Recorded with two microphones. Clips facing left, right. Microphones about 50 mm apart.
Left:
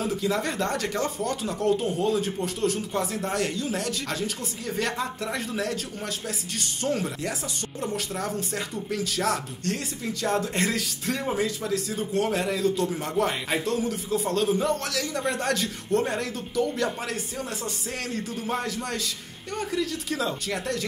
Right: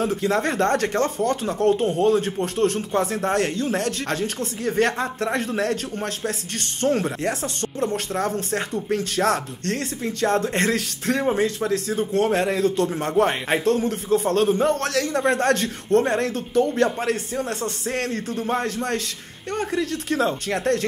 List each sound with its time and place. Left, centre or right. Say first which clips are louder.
0.0 s speech: right 5 dB; right